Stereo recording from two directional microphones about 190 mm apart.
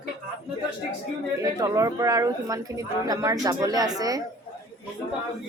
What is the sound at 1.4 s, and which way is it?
Speech, 20° right (ahead or behind).